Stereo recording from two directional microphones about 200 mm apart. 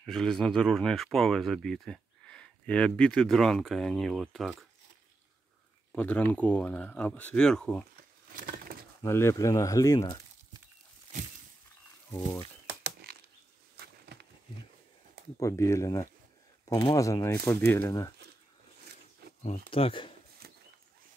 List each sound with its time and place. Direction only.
0.0 s speech: 5° left (ahead or behind)
5.9 s speech: 5° left (ahead or behind)
9.0 s speech: 15° left (ahead or behind)
12.1 s speech: 10° left (ahead or behind)
12.8 s a sound: 50° right (ahead or behind)
15.3 s speech: 15° left (ahead or behind)
19.2 s a sound: 55° right (ahead or behind)
19.7 s speech: 25° left (ahead or behind)